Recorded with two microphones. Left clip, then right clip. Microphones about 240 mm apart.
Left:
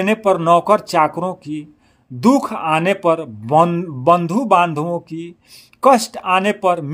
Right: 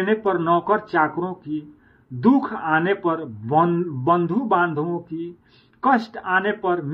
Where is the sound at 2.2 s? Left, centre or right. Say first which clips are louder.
Left 4 dB; left.